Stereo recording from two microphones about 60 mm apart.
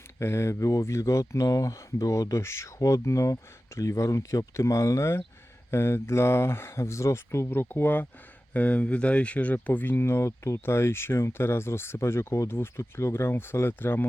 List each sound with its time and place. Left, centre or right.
0.2 s speech: left
7.4 s speech: left